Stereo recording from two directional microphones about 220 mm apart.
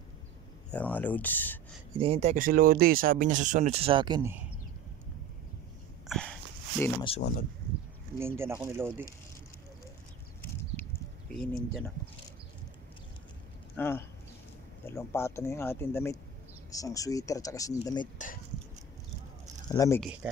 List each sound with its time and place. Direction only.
0.7 s speech: 5° left (ahead or behind)
2.0 s speech: 25° right (ahead or behind)
6.0 s a sound: 5° left (ahead or behind)
6.8 s speech: 20° left (ahead or behind)
8.2 s speech: 10° right (ahead or behind)
11.3 s speech: centre (ahead or behind)
13.7 s speech: 10° left (ahead or behind)
18.1 s speech: 35° left (ahead or behind)
19.7 s speech: 15° left (ahead or behind)
20.0 s speech: 5° right (ahead or behind)